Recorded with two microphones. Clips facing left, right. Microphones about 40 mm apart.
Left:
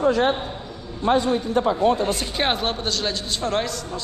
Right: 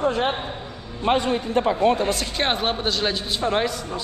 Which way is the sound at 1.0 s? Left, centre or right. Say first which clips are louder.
Left 1 dB; right.